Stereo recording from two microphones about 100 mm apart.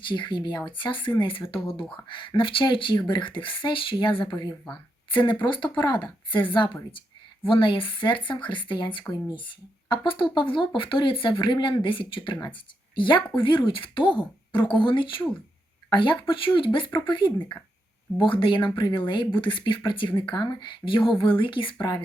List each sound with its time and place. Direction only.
0.1 s speech: 50° left (ahead or behind)